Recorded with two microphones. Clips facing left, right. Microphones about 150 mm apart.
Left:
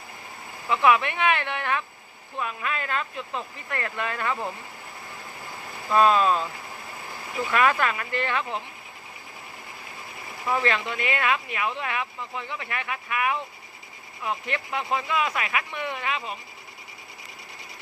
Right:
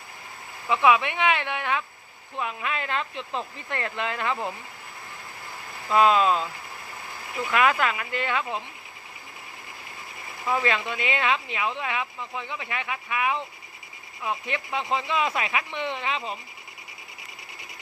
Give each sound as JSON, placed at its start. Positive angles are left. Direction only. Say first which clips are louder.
{"t": 0.7, "sound": "speech", "louder": "even", "side_deg": -15}
{"t": 5.9, "sound": "speech", "louder": "even", "side_deg": -15}
{"t": 7.5, "sound": "speech", "louder": "even", "side_deg": -10}
{"t": 10.5, "sound": "speech", "louder": "even", "side_deg": -15}